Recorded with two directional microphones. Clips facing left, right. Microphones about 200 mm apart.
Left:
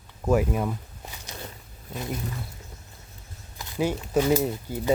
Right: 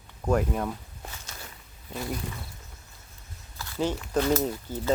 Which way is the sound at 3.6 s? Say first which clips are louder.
Left 2 dB; 15° left (ahead or behind).